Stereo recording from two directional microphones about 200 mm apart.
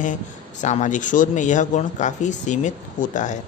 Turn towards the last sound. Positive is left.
turn(degrees=40)  # may be behind; listen again after turning